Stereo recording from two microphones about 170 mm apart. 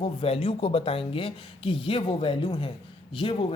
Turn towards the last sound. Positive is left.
turn(degrees=30)  # may be behind; listen again after turning